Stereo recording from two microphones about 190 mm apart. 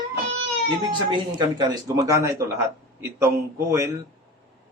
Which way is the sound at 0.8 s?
25° right (ahead or behind).